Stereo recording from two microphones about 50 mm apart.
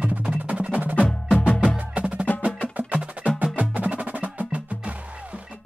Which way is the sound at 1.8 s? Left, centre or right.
Right.